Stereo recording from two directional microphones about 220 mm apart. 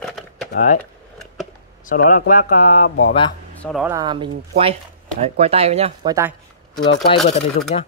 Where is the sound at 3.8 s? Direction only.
15° right (ahead or behind).